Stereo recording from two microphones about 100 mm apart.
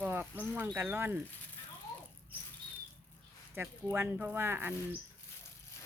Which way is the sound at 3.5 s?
20° right (ahead or behind).